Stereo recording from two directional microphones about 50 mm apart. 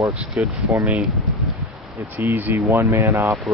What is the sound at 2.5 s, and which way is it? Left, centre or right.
Speech, right.